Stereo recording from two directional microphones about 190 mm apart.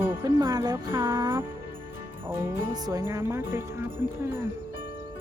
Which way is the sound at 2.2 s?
15° right (ahead or behind).